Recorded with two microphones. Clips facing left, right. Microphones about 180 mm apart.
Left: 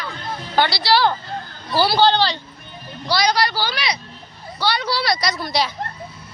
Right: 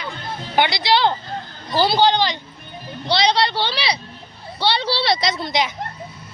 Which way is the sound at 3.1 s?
25° right (ahead or behind).